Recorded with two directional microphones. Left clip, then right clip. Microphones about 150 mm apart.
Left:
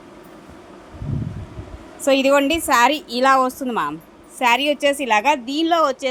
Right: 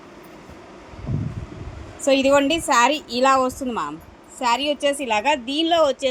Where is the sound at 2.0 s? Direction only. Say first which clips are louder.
Left 1 dB; 5° left (ahead or behind).